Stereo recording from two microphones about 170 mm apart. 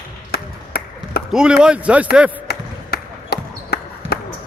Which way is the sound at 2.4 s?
70° left (ahead or behind).